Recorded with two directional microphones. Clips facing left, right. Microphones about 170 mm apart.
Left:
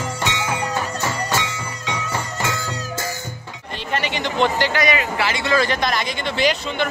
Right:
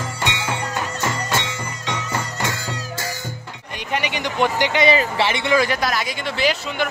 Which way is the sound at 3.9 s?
15° right (ahead or behind).